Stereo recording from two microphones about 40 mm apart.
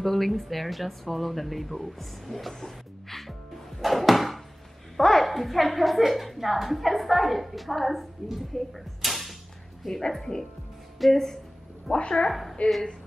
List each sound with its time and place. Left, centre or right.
0.0 s speech: centre
11.9 s speech: left
12.3 s speech: centre